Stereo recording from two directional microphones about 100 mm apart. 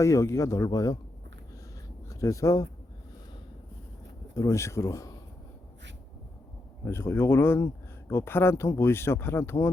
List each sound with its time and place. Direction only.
0.0 s speech: 30° left (ahead or behind)
2.0 s speech: 30° left (ahead or behind)
4.4 s speech: 30° left (ahead or behind)
6.8 s speech: 25° left (ahead or behind)